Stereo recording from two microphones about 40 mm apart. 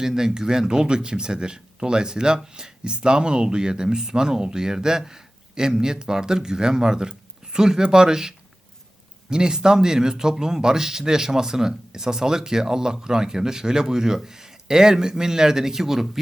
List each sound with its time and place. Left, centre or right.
0.0 s speech: centre